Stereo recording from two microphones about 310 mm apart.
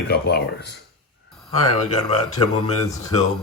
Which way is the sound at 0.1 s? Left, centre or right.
Left.